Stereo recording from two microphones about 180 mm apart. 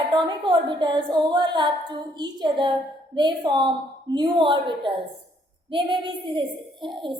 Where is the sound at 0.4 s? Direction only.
25° right (ahead or behind).